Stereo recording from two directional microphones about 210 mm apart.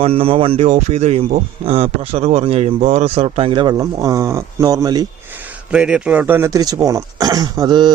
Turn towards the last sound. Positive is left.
turn(degrees=-20)  # may be behind; listen again after turning